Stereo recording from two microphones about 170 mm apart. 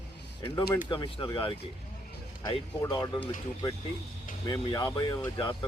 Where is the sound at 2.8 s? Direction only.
20° left (ahead or behind).